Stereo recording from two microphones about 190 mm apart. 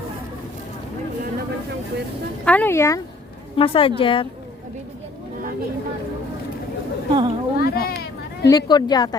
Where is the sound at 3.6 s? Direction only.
30° left (ahead or behind).